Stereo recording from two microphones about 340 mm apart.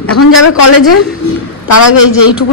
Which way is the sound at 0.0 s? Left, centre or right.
Left.